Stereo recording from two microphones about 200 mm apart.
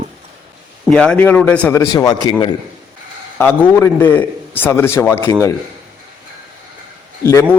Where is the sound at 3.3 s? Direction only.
10° left (ahead or behind).